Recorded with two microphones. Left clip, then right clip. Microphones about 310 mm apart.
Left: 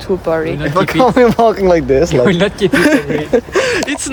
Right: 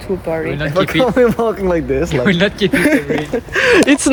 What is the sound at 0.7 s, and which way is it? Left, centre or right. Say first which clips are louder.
Speech: left 3 dB; left.